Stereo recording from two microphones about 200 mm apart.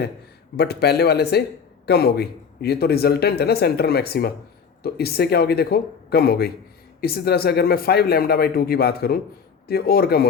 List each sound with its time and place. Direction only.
0.5 s speech: 55° left (ahead or behind)